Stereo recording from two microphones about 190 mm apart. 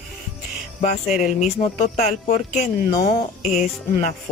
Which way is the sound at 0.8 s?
35° left (ahead or behind).